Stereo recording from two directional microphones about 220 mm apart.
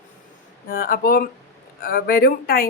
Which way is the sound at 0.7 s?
40° left (ahead or behind).